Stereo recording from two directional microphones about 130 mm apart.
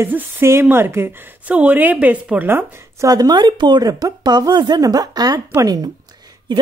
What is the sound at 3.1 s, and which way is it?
Speech, 30° right (ahead or behind).